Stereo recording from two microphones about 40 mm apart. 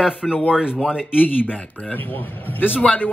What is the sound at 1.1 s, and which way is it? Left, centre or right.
A man's voice, left.